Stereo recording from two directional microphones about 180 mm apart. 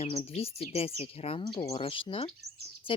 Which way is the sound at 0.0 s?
35° left (ahead or behind).